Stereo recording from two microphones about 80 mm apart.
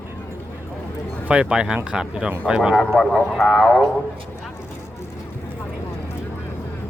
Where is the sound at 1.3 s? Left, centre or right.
Centre.